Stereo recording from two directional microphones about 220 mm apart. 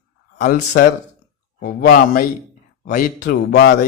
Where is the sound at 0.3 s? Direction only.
40° left (ahead or behind).